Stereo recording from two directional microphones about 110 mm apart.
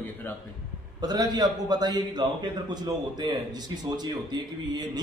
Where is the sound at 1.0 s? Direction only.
40° right (ahead or behind).